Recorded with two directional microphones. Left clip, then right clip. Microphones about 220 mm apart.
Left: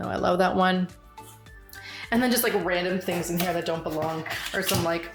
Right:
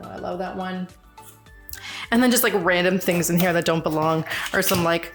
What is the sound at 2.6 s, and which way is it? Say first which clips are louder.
Speech: right 6 dB; 40° right (ahead or behind).